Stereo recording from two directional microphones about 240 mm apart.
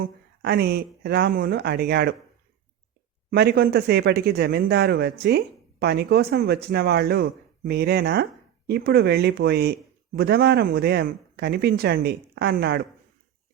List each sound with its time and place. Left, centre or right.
0.0 s a man's voice: right
3.2 s a man's voice: right